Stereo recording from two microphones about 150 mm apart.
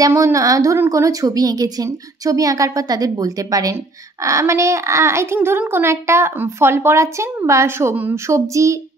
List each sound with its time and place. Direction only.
0.0 s a woman's voice: 20° right (ahead or behind)